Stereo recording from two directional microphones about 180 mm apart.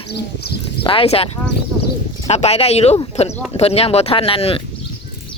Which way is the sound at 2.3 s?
35° left (ahead or behind).